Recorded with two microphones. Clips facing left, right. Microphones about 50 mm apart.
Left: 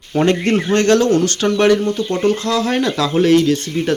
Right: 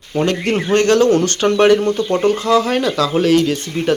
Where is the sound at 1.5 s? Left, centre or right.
Centre.